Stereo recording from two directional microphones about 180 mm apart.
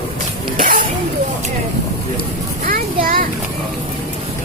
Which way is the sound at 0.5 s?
50° right (ahead or behind).